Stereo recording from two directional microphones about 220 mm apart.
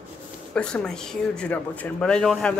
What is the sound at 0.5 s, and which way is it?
Speech, 5° left (ahead or behind).